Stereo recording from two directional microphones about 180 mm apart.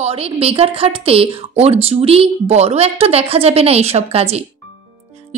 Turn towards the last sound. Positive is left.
turn(degrees=-35)  # may be behind; listen again after turning